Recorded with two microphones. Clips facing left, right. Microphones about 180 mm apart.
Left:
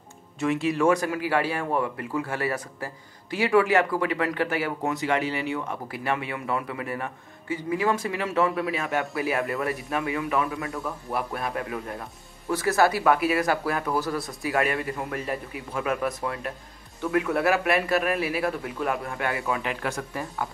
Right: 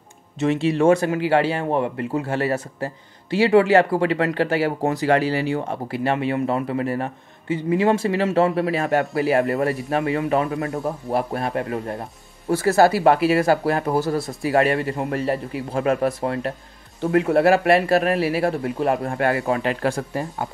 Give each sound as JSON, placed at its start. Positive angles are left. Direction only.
{"t": 0.4, "sound": "speech", "side_deg": -25}
{"t": 8.5, "sound": "a man's voice", "side_deg": -45}
{"t": 19.0, "sound": "a man's voice", "side_deg": -40}